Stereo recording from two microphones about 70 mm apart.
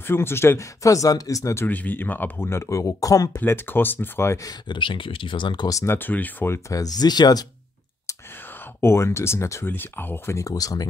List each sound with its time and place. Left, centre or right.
0.0 s speech: left
0.8 s speech: left
1.7 s speech: left
3.3 s speech: left
4.4 s speech: left
5.5 s speech: left
5.9 s speech: left
6.5 s speech: left
8.8 s speech: left
9.7 s speech: left
10.3 s speech: left